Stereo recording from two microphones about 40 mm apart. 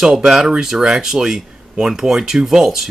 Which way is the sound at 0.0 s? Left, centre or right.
Centre.